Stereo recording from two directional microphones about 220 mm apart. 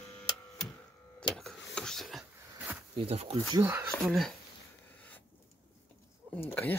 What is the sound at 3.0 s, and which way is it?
Speech, 25° right (ahead or behind).